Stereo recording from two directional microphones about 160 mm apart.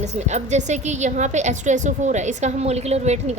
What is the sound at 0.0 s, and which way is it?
A woman's voice, 45° right (ahead or behind).